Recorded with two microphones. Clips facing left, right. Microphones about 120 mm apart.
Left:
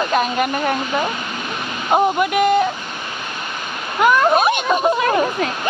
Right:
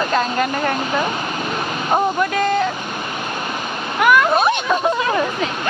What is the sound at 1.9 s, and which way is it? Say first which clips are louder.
Speech: left 3 dB; 10° left (ahead or behind).